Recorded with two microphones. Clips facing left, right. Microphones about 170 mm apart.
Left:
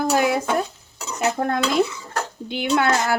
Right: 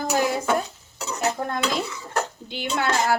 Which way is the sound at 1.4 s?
60° left (ahead or behind).